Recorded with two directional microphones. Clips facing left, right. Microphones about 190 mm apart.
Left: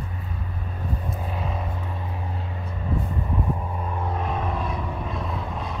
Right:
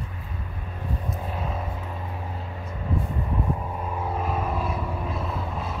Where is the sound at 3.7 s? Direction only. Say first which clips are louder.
Even; 5° right (ahead or behind).